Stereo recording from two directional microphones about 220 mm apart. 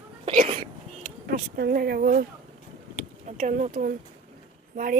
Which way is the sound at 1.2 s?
45° right (ahead or behind).